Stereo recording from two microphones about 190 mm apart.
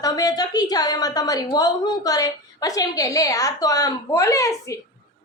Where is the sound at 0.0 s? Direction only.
20° left (ahead or behind).